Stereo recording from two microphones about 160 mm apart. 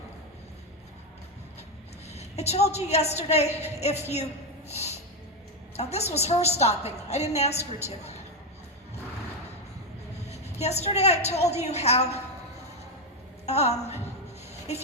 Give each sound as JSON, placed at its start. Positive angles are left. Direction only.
{"t": 2.0, "sound": "a woman's voice", "side_deg": 40}
{"t": 4.7, "sound": "snort", "side_deg": 40}
{"t": 5.7, "sound": "a woman's voice", "side_deg": 40}
{"t": 10.2, "sound": "a woman's voice", "side_deg": 40}
{"t": 13.4, "sound": "a woman's voice", "side_deg": 40}